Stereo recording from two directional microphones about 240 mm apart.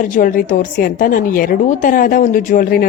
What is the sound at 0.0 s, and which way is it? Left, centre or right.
A woman's voice, left.